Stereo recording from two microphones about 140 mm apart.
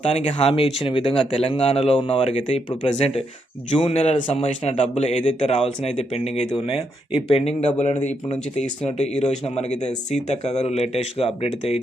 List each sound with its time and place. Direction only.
0.2 s a man's voice: 50° left (ahead or behind)